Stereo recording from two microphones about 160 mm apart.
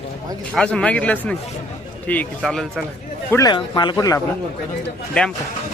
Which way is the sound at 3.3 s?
25° left (ahead or behind).